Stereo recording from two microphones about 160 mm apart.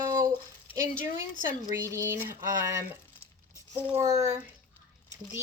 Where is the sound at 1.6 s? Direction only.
20° right (ahead or behind).